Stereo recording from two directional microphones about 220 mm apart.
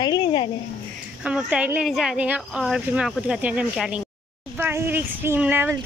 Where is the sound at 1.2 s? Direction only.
5° right (ahead or behind).